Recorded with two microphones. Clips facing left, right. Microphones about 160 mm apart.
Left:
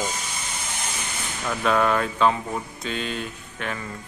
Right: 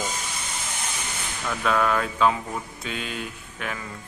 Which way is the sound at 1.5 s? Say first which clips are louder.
Left 2 dB; 5° left (ahead or behind).